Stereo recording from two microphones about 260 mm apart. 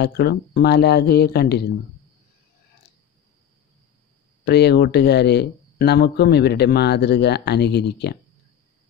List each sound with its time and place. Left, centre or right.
0.0 s speech: left
4.5 s speech: left